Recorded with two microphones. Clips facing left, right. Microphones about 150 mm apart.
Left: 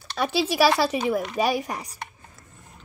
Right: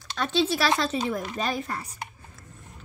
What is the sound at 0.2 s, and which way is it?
Speech, 10° left (ahead or behind).